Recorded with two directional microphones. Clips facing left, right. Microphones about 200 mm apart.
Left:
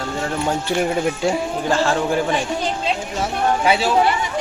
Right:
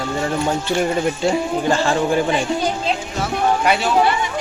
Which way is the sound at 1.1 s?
Centre (ahead or behind).